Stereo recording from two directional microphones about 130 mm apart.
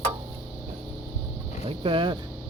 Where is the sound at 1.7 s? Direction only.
40° right (ahead or behind).